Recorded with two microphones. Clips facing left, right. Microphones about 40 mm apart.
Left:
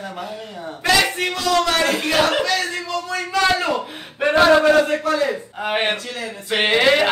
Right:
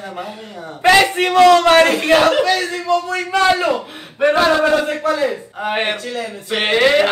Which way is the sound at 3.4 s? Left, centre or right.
Centre.